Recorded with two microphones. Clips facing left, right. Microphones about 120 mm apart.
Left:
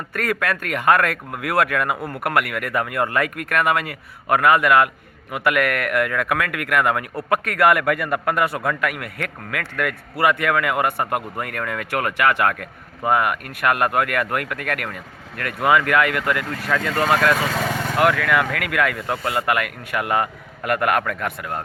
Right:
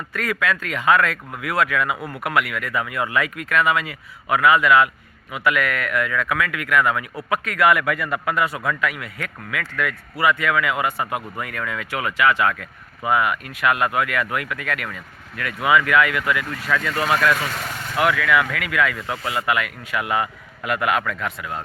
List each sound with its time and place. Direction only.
0.1 s a man's voice: 50° left (ahead or behind)
17.5 s speech: 90° left
17.8 s a man's voice: 45° left (ahead or behind)